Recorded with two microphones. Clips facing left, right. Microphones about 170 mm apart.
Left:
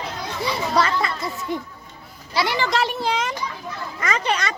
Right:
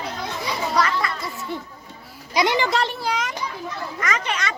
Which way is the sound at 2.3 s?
20° right (ahead or behind).